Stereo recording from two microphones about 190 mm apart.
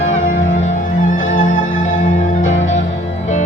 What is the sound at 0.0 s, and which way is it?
Music, 45° left (ahead or behind).